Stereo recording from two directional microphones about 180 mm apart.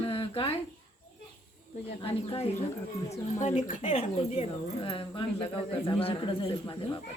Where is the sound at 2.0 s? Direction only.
35° left (ahead or behind).